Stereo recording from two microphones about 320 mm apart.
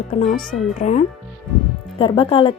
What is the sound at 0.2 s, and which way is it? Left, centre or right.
A woman's voice, left.